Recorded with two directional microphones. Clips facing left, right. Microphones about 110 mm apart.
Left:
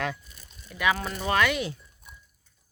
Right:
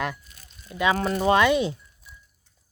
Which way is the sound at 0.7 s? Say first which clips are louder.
Right 3 dB; 25° right (ahead or behind).